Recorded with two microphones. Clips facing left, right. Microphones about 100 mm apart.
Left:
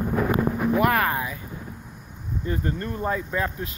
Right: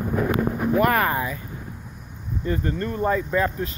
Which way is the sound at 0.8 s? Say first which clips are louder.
Right 3 dB; centre (ahead or behind).